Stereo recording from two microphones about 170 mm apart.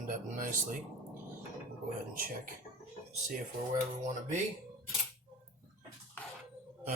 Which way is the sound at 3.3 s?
45° right (ahead or behind).